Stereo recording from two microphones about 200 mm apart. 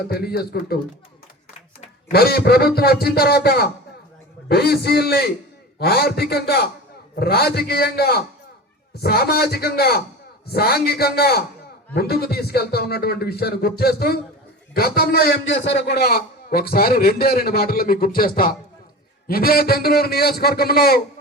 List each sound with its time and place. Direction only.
0.1 s a man's voice: 50° left (ahead or behind)
2.1 s a man's voice: 50° left (ahead or behind)